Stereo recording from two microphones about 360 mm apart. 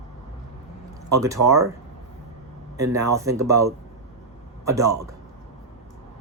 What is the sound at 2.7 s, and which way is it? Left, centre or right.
Speech, centre.